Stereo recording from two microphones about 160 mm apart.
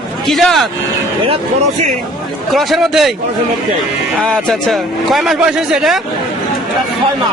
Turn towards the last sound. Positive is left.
turn(degrees=0)  # may be behind; listen again after turning